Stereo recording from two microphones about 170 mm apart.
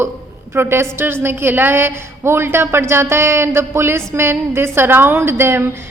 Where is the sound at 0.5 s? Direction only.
15° right (ahead or behind).